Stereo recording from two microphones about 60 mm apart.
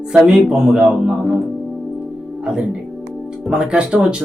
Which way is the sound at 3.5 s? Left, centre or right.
Centre.